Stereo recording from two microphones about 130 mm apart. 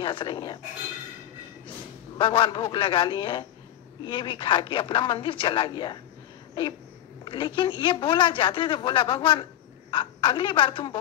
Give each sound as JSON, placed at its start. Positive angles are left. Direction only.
{"t": 0.0, "sound": "speech", "side_deg": 40}
{"t": 2.1, "sound": "speech", "side_deg": 40}
{"t": 7.2, "sound": "speech", "side_deg": 40}